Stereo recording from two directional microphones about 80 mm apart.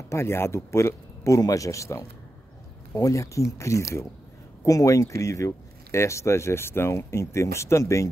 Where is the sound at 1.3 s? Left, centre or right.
Left.